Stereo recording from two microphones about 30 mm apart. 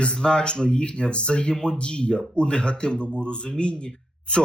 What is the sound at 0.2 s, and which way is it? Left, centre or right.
A man's voice, left.